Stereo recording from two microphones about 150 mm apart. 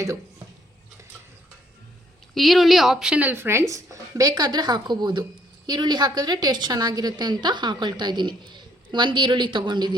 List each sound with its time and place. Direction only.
2.3 s a woman's voice: centre (ahead or behind); by 9.9 s 30° right (ahead or behind)